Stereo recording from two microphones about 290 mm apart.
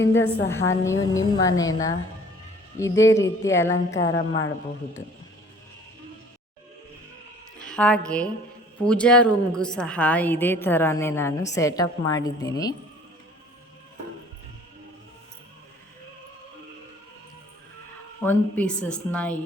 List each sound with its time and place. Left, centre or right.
0.0 s a woman's voice: left
0.4 s a woman's voice: centre
3.7 s a woman's voice: left
7.6 s a woman's voice: centre
18.2 s a woman's voice: centre